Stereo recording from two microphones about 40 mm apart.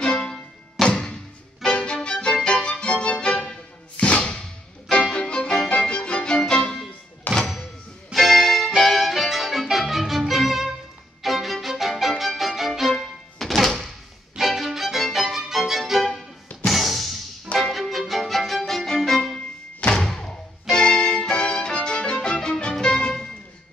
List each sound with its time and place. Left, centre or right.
0.2 s music: centre
1.6 s violin: left
2.0 s music: centre
4.2 s whip: left
5.2 s music: left
7.3 s music: left
8.1 s music: centre
12.9 s music: centre
14.3 s violin: centre
16.6 s music: centre
17.7 s violin: centre
19.9 s music: centre